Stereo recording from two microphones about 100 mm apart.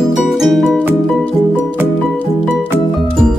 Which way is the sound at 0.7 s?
15° right (ahead or behind).